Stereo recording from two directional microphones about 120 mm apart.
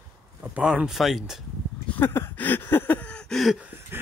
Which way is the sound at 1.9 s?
20° left (ahead or behind).